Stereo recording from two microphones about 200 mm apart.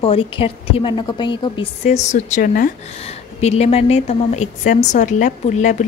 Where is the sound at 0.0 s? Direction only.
30° left (ahead or behind).